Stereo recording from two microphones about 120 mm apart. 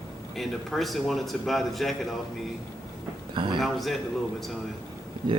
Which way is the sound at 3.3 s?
40° right (ahead or behind).